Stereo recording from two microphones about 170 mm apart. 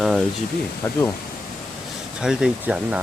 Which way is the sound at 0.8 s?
15° left (ahead or behind).